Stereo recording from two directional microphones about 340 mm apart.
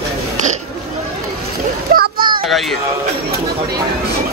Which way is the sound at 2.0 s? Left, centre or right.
Right.